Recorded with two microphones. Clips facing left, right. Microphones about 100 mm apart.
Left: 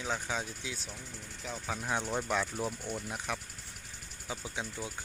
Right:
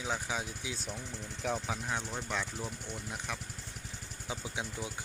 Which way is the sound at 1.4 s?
60° right (ahead or behind).